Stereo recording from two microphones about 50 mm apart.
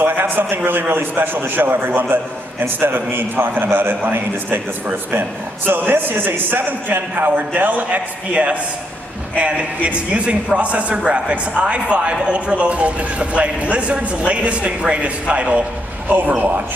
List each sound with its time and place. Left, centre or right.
0.0 s a man's voice: right
5.7 s a man's voice: right
9.4 s a man's voice: right
16.1 s a man's voice: right